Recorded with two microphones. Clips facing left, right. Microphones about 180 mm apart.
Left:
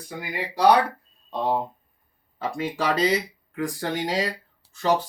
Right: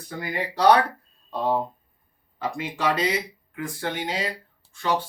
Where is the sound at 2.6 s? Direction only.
35° left (ahead or behind).